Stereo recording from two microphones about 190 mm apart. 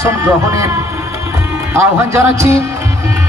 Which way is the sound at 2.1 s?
15° right (ahead or behind).